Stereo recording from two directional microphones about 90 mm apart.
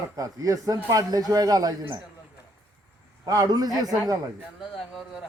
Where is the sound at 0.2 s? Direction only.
40° right (ahead or behind).